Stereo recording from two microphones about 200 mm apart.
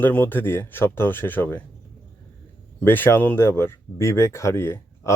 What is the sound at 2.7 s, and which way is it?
Speech, 10° left (ahead or behind).